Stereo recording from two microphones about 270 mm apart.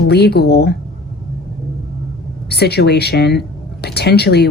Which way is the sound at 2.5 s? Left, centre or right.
Left.